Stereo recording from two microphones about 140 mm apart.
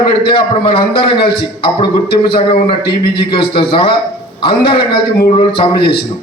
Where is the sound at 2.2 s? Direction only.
40° left (ahead or behind).